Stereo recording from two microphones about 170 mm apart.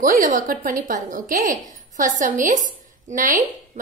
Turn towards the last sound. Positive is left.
turn(degrees=-50)  # may be behind; listen again after turning